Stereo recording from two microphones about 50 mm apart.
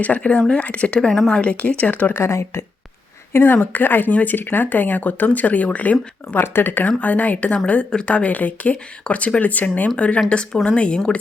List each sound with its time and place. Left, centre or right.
0.0 s speech: left
0.9 s a woman's voice: centre
1.3 s speech: left
2.1 s speech: left
3.3 s speech: left
6.4 s speech: left
6.8 s speech: left
10.2 s speech: centre